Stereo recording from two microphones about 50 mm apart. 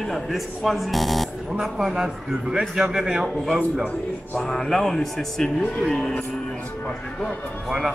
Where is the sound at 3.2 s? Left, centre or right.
Centre.